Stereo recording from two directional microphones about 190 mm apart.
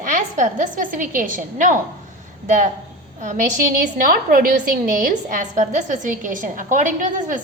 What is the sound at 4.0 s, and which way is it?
A woman's voice, 45° right (ahead or behind).